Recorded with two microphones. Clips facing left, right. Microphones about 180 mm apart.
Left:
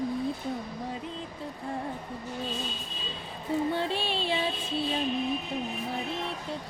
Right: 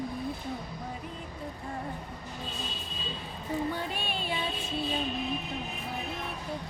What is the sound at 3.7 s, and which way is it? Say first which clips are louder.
Music: left 5 dB; 25° left (ahead or behind).